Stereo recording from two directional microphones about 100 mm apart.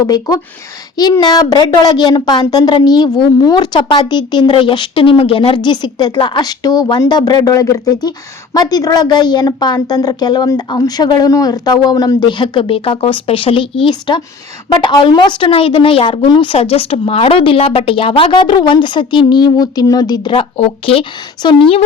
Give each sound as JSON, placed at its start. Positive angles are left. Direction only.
{"t": 0.0, "sound": "a woman's voice", "side_deg": 40}
{"t": 3.8, "sound": "a woman's voice", "side_deg": 55}
{"t": 5.5, "sound": "a woman's voice", "side_deg": 45}
{"t": 16.6, "sound": "a woman's voice", "side_deg": 70}
{"t": 20.3, "sound": "speech", "side_deg": 70}